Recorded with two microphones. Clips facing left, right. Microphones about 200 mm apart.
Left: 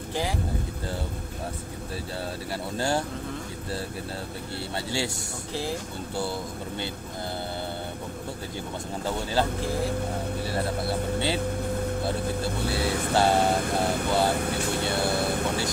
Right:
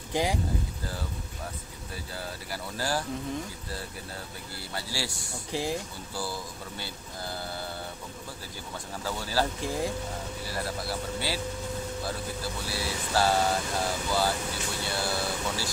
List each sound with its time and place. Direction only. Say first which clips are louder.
0.1 s speech: right 2 dB; 15° right (ahead or behind)
2.5 s speech: left 4 dB; 25° left (ahead or behind)
4.7 s speech: left 5 dB; 25° left (ahead or behind)
5.5 s speech: even; 15° right (ahead or behind)
6.1 s speech: left 4 dB; 25° left (ahead or behind)
10.5 s speech: left 4 dB; 25° left (ahead or behind)
12.0 s speech: left 6 dB; 60° left (ahead or behind)
13.1 s speech: left 3 dB; 25° left (ahead or behind)
13.6 s speech: left 5 dB; 55° left (ahead or behind)